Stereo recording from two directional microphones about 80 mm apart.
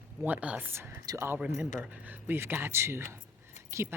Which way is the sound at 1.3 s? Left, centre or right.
Centre.